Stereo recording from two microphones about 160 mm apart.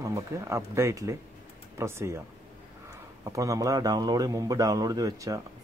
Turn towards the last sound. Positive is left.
turn(degrees=-20)  # may be behind; listen again after turning